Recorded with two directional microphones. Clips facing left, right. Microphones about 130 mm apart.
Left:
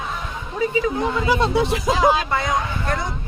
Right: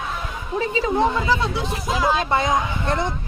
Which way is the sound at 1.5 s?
65° left (ahead or behind).